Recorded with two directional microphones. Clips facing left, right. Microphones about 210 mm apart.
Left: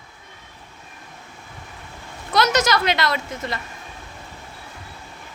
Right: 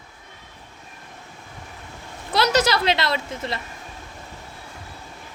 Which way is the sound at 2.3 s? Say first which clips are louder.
Even; 30° right (ahead or behind).